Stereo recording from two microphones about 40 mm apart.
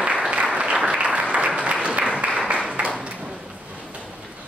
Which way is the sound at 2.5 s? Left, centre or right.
Right.